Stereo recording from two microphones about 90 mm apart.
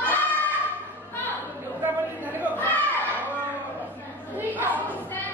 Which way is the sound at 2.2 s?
20° right (ahead or behind).